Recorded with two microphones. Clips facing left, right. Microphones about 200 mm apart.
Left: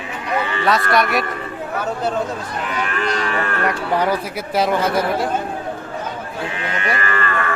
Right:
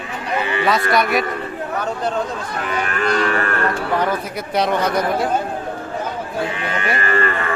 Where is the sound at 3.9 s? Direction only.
10° left (ahead or behind).